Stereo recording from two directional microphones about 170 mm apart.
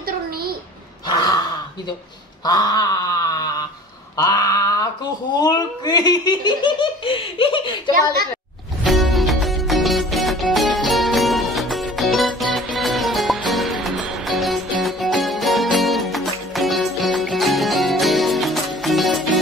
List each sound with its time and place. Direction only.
2.4 s wail: 25° left (ahead or behind)
4.2 s a sound: 20° left (ahead or behind)
5.3 s speech: 25° left (ahead or behind)
8.8 s music: centre (ahead or behind)